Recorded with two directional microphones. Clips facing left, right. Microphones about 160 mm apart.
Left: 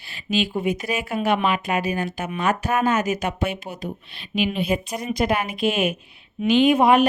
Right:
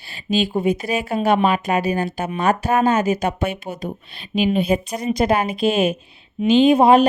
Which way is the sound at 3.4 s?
50° right (ahead or behind).